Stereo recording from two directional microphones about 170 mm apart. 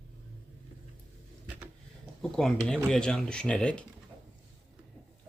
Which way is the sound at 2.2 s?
5° left (ahead or behind).